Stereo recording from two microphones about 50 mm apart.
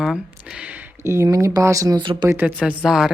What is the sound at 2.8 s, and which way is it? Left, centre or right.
Speech, centre.